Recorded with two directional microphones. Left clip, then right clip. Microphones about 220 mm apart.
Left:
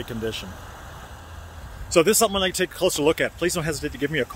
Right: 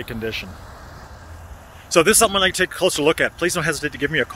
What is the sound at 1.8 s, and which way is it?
Speech, 5° left (ahead or behind).